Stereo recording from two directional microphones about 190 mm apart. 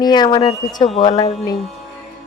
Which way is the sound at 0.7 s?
35° left (ahead or behind).